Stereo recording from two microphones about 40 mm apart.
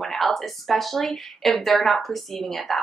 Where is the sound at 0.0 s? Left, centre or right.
Centre.